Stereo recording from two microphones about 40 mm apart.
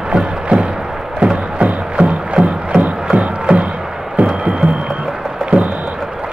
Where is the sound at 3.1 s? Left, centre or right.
Right.